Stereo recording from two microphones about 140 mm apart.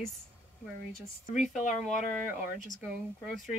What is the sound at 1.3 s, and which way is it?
Speech, 60° left (ahead or behind).